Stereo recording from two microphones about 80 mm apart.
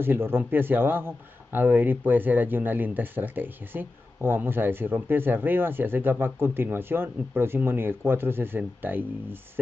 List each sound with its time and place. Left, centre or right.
0.0 s speech: right